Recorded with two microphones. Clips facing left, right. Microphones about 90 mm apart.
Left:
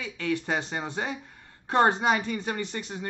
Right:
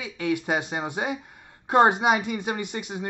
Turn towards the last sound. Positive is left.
turn(degrees=-15)  # may be behind; listen again after turning